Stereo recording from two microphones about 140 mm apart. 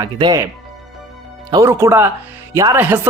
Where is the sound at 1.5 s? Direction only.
25° right (ahead or behind).